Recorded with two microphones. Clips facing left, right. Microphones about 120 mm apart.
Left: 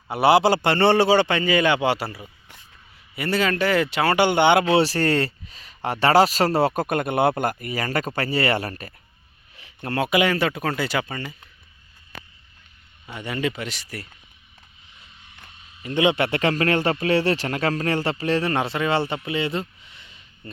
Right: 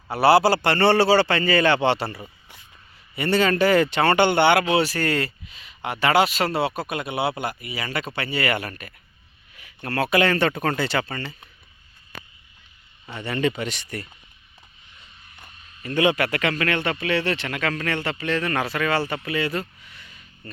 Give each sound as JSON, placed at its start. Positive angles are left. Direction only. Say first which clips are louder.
{"t": 0.1, "sound": "a man's voice", "louder": "even", "side_deg": 20}
{"t": 4.7, "sound": "a man's voice", "louder": "left 3 dB", "side_deg": 35}
{"t": 13.1, "sound": "speech", "louder": "right 2 dB", "side_deg": 10}
{"t": 15.8, "sound": "speech", "louder": "left 1 dB", "side_deg": 20}